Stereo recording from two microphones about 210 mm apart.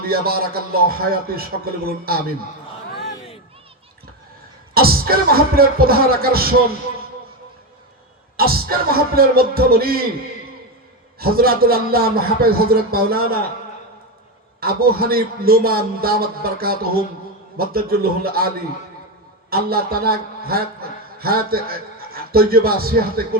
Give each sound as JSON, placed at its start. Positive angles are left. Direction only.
{"t": 0.0, "sound": "a man's voice", "side_deg": -45}
{"t": 4.7, "sound": "a man's voice", "side_deg": -45}
{"t": 8.4, "sound": "a man's voice", "side_deg": -45}
{"t": 11.2, "sound": "a man's voice", "side_deg": -45}
{"t": 14.6, "sound": "a man's voice", "side_deg": -45}